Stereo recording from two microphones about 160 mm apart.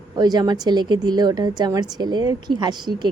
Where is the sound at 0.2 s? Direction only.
25° right (ahead or behind).